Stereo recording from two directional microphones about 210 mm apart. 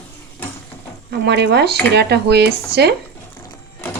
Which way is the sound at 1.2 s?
55° right (ahead or behind).